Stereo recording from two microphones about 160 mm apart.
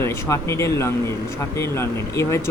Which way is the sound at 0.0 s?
15° left (ahead or behind).